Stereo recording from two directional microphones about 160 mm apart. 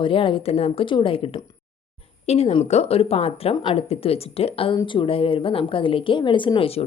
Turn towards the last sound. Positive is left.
turn(degrees=35)  # may be behind; listen again after turning